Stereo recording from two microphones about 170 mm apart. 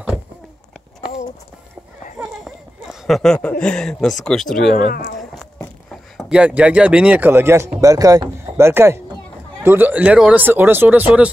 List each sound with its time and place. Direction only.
2.1 s a sound: centre (ahead or behind)
3.4 s speech: 5° left (ahead or behind)
4.8 s speech: 60° left (ahead or behind)
5.9 s speech: centre (ahead or behind)